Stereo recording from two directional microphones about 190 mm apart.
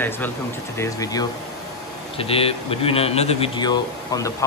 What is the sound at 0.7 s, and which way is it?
Speech, 15° left (ahead or behind).